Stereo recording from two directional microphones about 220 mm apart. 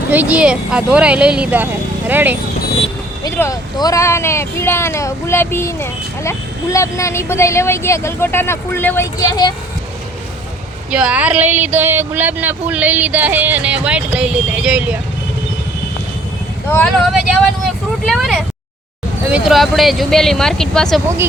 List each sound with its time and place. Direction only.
0.1 s speech: 5° right (ahead or behind)
3.2 s speech: 15° left (ahead or behind)
10.9 s speech: 5° right (ahead or behind)
16.7 s speech: centre (ahead or behind)